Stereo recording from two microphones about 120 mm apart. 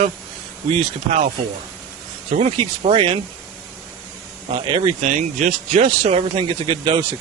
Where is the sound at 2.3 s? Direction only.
60° right (ahead or behind).